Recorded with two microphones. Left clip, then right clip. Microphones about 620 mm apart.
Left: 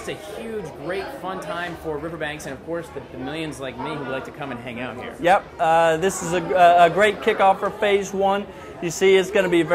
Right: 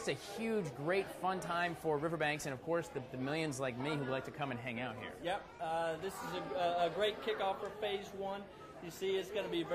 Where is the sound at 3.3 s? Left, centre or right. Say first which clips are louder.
Left 8 dB; right.